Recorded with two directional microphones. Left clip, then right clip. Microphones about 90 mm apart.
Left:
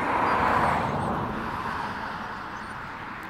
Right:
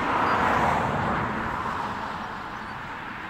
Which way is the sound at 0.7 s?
40° left (ahead or behind).